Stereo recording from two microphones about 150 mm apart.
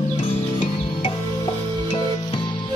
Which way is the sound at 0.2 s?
40° left (ahead or behind).